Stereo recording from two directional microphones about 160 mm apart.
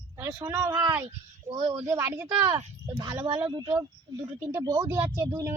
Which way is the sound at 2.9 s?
25° right (ahead or behind).